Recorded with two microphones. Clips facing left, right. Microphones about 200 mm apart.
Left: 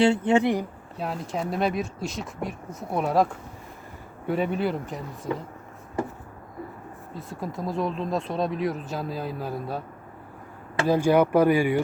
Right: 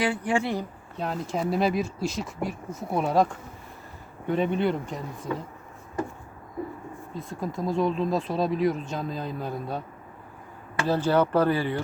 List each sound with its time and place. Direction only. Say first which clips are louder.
0.0 s speech: left 6 dB; 25° left (ahead or behind)
0.9 s speech: right 1 dB; 5° left (ahead or behind)
7.1 s speech: right 1 dB; 5° left (ahead or behind)
10.8 s speech: left 3 dB; 15° left (ahead or behind)